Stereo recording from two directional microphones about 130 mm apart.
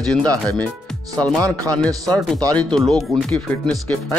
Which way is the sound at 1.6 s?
5° left (ahead or behind).